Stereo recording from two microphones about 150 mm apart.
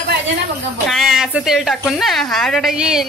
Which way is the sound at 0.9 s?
Centre (ahead or behind).